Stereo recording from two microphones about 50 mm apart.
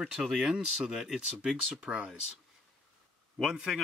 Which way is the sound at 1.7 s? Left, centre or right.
Right.